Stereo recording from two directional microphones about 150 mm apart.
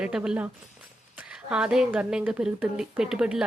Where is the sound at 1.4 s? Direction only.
5° right (ahead or behind).